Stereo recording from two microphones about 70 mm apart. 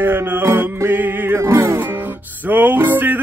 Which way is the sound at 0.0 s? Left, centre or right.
Right.